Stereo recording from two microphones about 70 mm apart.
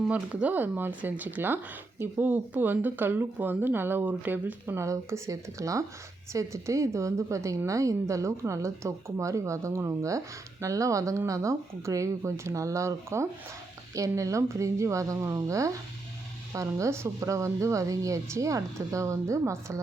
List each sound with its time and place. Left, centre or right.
0.1 s speech: centre
4.9 s speech: right